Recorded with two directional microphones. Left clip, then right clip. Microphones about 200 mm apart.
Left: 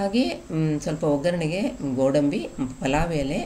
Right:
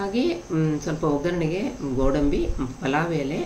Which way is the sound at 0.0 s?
40° left (ahead or behind).